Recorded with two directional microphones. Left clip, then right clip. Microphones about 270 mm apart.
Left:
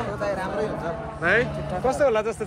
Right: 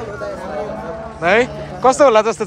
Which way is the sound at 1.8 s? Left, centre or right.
Right.